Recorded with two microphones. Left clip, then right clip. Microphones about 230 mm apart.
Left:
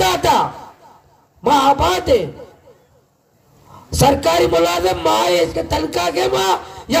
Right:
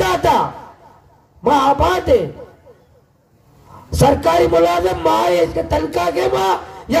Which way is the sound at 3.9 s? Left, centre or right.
Left.